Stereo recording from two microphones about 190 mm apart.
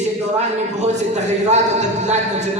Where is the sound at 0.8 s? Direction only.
35° right (ahead or behind).